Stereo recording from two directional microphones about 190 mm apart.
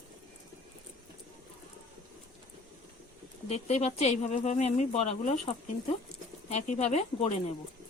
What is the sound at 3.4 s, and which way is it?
Speech, 35° left (ahead or behind).